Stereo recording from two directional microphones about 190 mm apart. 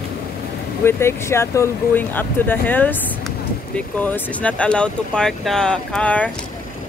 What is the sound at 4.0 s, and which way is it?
Speech, 5° left (ahead or behind).